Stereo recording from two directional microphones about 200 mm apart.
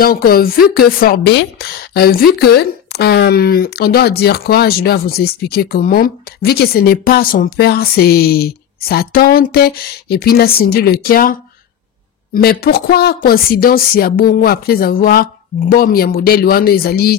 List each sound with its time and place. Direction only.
0.0 s speech: 50° left (ahead or behind)
12.4 s speech: 50° left (ahead or behind)